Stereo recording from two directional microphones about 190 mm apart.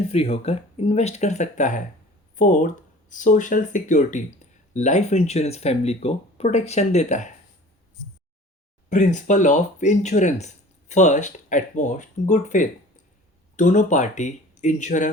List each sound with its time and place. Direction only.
0.1 s speech: 30° left (ahead or behind)
8.9 s speech: 40° left (ahead or behind)